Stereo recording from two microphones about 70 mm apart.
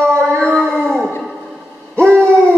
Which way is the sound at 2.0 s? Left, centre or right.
Right.